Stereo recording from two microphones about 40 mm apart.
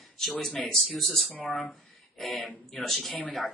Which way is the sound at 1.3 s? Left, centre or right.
Left.